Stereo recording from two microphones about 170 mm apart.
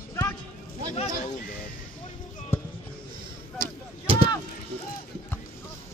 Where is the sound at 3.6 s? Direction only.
30° right (ahead or behind).